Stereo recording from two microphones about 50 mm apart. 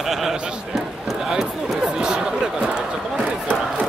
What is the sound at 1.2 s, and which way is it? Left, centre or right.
Speech, centre.